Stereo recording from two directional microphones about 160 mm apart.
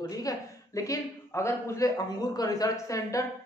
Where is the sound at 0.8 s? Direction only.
20° left (ahead or behind).